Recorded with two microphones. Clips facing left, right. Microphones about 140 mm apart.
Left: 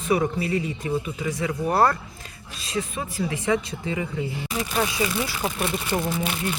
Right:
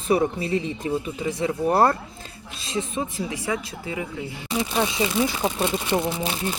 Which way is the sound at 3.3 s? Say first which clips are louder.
Left 4 dB; 5° right (ahead or behind).